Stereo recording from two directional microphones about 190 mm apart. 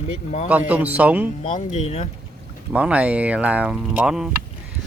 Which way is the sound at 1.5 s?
35° left (ahead or behind).